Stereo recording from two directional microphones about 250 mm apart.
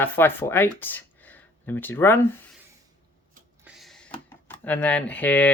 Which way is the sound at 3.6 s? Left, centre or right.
Centre.